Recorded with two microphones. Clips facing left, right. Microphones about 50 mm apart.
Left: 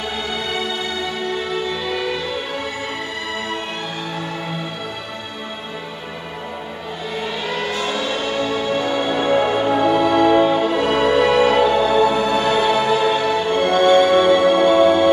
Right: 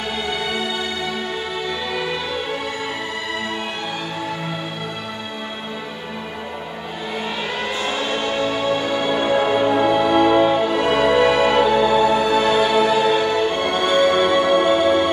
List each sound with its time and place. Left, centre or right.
1.9 s music: centre
7.4 s a sound: centre
7.8 s music: centre
8.8 s music: centre